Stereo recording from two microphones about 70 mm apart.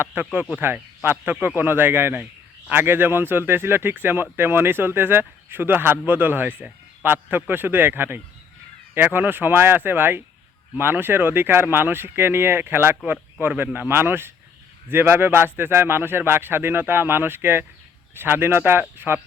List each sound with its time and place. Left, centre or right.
0.0 s speech: right